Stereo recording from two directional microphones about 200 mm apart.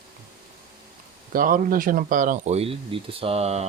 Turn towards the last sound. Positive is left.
turn(degrees=-30)  # may be behind; listen again after turning